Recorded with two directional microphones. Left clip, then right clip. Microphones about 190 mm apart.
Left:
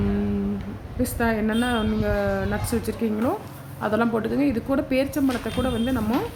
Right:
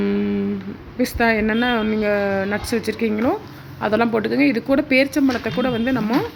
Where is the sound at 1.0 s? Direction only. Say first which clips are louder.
Right 6 dB; 15° right (ahead or behind).